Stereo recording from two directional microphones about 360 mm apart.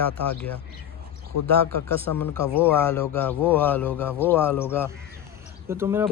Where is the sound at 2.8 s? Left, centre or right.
Centre.